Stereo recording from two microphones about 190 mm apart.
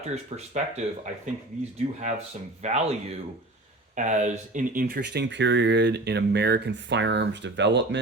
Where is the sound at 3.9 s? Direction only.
40° right (ahead or behind).